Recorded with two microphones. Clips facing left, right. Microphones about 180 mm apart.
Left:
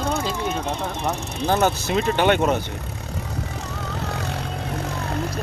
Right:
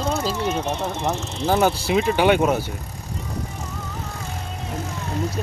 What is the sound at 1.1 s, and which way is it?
Speech, 15° left (ahead or behind).